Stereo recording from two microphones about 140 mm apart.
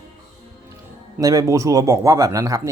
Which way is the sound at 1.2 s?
25° right (ahead or behind).